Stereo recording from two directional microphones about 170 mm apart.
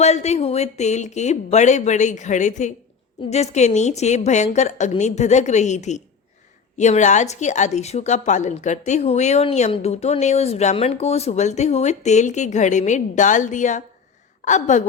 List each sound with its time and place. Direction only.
0.0 s a woman's voice: 40° left (ahead or behind)